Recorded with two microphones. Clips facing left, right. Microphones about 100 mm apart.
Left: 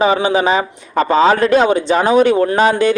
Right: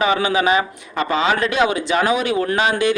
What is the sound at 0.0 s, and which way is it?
A man's voice, 30° left (ahead or behind).